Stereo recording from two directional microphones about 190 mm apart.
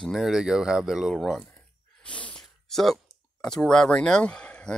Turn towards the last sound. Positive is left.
turn(degrees=5)  # may be behind; listen again after turning